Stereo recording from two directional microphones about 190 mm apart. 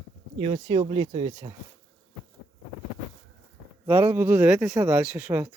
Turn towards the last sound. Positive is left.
turn(degrees=-10)  # may be behind; listen again after turning